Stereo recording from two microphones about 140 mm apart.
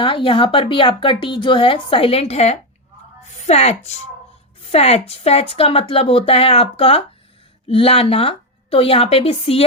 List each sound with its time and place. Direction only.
0.0 s speech: 35° left (ahead or behind)